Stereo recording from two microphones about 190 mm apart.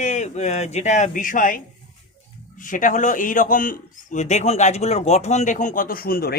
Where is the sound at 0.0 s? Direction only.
40° left (ahead or behind).